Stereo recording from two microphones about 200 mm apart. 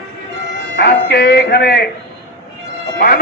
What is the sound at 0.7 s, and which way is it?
Speech, 55° left (ahead or behind).